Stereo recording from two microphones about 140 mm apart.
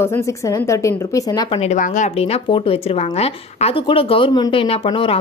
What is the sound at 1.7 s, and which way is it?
Speech, 65° left (ahead or behind).